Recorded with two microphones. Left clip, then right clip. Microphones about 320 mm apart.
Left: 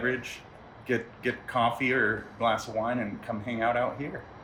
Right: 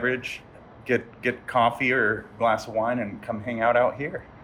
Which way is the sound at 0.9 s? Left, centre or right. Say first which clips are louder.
Right 5 dB; centre.